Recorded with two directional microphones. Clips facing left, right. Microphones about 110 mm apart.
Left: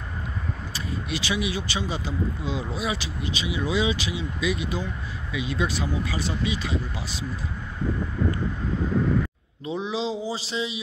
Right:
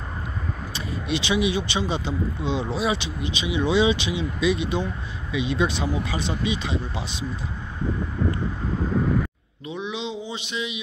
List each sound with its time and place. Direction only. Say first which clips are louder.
0.7 s speech: right 4 dB; 25° right (ahead or behind)
9.7 s mantra: left 3 dB; 30° left (ahead or behind)